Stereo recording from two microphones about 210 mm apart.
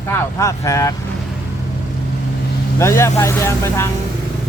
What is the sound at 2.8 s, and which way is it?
Speech, 15° left (ahead or behind).